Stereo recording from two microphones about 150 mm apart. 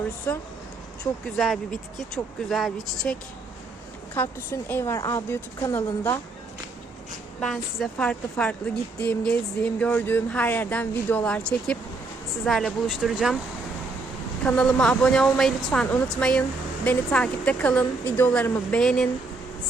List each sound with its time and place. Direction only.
1.2 s speech: centre (ahead or behind)
4.1 s a woman's voice: 20° left (ahead or behind)
7.4 s speech: 5° left (ahead or behind)
14.4 s speech: 5° left (ahead or behind)